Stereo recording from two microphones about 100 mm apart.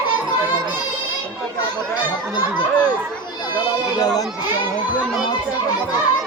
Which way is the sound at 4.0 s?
40° left (ahead or behind).